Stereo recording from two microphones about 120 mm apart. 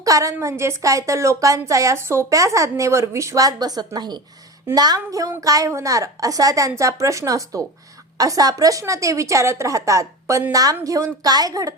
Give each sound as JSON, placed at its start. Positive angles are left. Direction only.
{"t": 0.0, "sound": "a woman's voice", "side_deg": -25}